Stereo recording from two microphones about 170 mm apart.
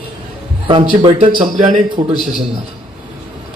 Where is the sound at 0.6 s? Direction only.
30° right (ahead or behind).